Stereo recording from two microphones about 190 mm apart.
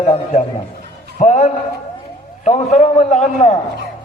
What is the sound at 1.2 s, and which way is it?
A man's voice, 40° left (ahead or behind).